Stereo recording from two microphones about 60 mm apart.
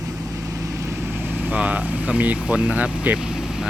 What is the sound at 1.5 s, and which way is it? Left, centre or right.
Speech, right.